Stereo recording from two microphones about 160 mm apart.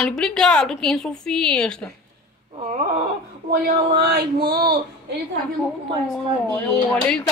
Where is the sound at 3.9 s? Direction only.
80° right.